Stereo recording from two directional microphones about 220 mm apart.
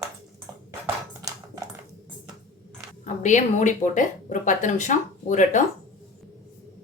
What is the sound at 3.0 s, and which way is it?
Speech, 35° left (ahead or behind).